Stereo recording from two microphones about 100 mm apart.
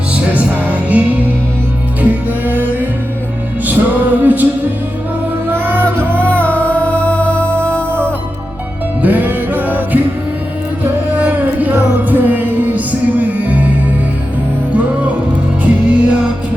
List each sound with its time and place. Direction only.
0.1 s music: 15° right (ahead or behind)
5.5 s music: 20° right (ahead or behind)
6.1 s music: 15° left (ahead or behind)
9.0 s music: 15° right (ahead or behind)
11.2 s a sound: 15° right (ahead or behind)
12.0 s music: 20° right (ahead or behind)
14.7 s music: 15° right (ahead or behind)